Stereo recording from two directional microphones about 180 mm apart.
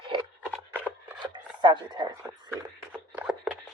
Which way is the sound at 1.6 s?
25° right (ahead or behind).